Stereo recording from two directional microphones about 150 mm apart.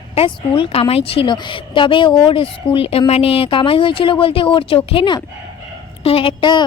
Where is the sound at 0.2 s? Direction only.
35° left (ahead or behind).